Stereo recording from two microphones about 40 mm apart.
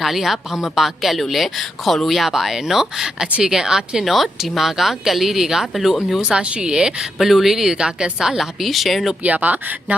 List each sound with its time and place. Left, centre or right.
0.0 s a woman's voice: centre
4.0 s a woman's voice: centre
6.2 s a woman's voice: right
7.2 s speech: centre
8.4 s a woman's voice: centre
9.2 s speech: right